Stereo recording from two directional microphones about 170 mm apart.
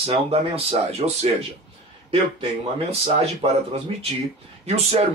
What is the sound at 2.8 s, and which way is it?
Speech, 35° right (ahead or behind).